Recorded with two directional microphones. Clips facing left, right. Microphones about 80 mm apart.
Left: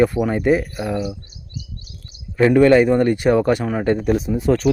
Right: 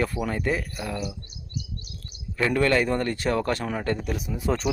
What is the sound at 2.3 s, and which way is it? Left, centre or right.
Speech, centre.